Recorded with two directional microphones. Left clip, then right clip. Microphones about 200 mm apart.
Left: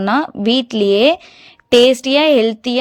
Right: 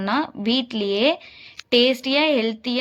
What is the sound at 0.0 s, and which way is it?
Speech, 35° left (ahead or behind).